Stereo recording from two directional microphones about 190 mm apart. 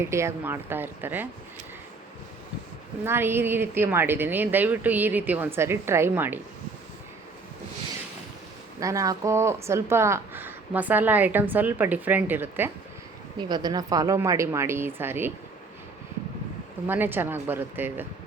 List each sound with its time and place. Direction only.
0.0 s speech: 15° right (ahead or behind)
3.0 s speech: 10° right (ahead or behind)
8.8 s speech: 15° right (ahead or behind)
16.8 s speech: 10° right (ahead or behind)